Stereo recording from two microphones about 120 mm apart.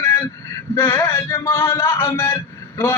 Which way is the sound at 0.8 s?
20° left (ahead or behind).